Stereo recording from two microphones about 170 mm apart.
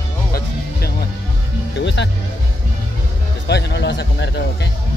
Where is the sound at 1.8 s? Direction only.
90° left.